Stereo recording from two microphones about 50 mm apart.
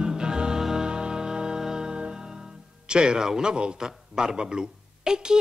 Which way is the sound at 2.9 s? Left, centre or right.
Centre.